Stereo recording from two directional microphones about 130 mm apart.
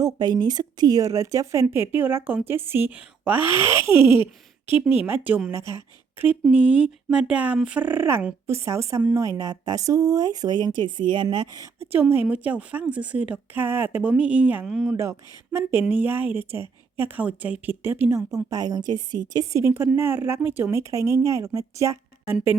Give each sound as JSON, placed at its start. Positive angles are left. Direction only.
{"t": 0.0, "sound": "speech", "side_deg": -30}
{"t": 5.0, "sound": "a woman's voice", "side_deg": -15}
{"t": 11.6, "sound": "a woman's voice", "side_deg": -15}
{"t": 14.9, "sound": "a woman's voice", "side_deg": -20}